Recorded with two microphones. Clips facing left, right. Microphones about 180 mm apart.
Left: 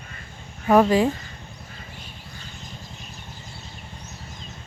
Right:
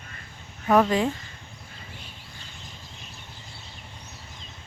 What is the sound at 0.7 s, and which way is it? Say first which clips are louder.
Speech: left 4 dB; 5° left (ahead or behind).